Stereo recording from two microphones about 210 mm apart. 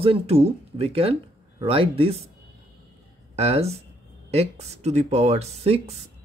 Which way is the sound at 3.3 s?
30° right (ahead or behind).